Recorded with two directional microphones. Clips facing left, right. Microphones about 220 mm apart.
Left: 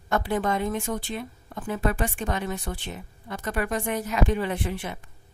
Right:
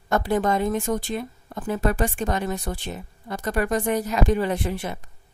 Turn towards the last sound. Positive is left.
turn(degrees=-40)  # may be behind; listen again after turning